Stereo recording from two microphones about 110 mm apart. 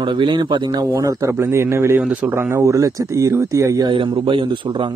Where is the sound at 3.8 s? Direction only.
45° right (ahead or behind).